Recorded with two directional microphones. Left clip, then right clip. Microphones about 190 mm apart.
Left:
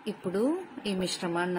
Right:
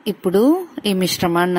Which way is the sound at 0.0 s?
50° right (ahead or behind).